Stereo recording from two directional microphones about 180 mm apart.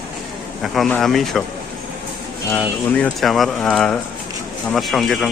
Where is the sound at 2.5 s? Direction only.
5° left (ahead or behind).